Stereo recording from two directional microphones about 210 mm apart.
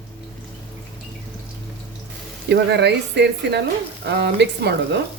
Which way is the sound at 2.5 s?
55° right (ahead or behind).